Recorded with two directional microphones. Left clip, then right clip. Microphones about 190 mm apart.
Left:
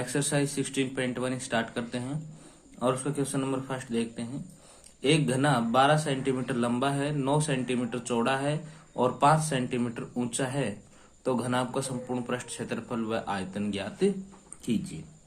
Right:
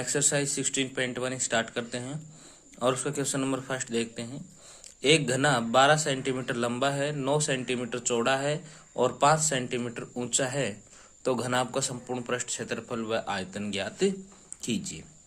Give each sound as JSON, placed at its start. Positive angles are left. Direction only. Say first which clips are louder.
{"t": 0.0, "sound": "a man's voice", "louder": "right 1 dB", "side_deg": -25}